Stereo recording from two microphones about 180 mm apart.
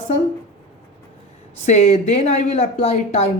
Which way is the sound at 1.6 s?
40° left (ahead or behind).